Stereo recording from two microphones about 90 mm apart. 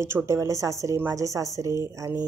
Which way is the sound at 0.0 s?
30° right (ahead or behind).